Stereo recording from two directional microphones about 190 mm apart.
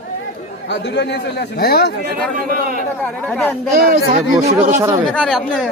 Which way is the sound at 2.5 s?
50° right (ahead or behind).